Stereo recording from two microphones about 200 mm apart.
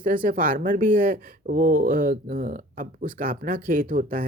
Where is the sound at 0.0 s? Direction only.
45° right (ahead or behind).